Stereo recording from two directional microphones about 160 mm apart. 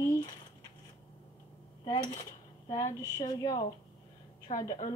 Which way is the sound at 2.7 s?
20° left (ahead or behind).